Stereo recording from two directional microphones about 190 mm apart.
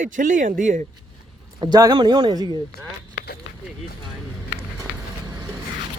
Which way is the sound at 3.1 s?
55° left (ahead or behind).